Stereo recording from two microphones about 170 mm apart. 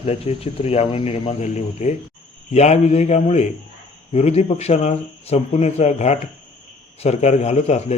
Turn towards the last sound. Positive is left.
turn(degrees=40)  # may be behind; listen again after turning